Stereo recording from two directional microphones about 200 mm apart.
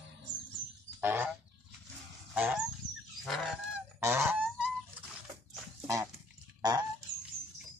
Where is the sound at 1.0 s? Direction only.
10° right (ahead or behind).